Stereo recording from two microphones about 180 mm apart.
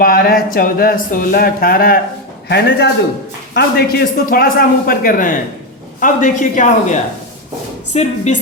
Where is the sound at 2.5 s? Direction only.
70° left (ahead or behind); by 8.4 s 40° left (ahead or behind).